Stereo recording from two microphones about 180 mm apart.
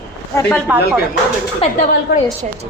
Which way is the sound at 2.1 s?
70° left (ahead or behind).